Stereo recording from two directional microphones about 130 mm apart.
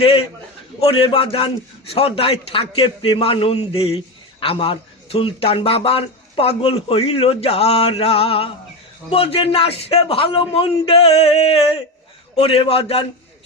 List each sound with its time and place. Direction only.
0.0 s a man's voice: 45° left (ahead or behind)